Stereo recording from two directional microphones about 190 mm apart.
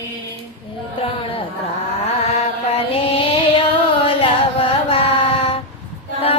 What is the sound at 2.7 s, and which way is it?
Mantra, 30° left (ahead or behind).